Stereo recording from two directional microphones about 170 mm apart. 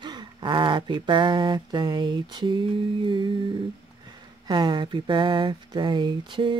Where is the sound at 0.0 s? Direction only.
25° right (ahead or behind).